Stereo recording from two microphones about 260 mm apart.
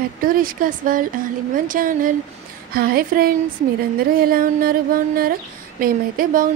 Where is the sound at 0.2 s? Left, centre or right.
Right.